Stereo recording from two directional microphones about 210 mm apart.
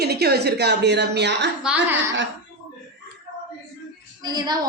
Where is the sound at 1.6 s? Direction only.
5° right (ahead or behind).